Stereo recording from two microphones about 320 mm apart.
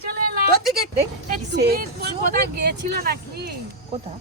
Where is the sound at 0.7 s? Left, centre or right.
Right.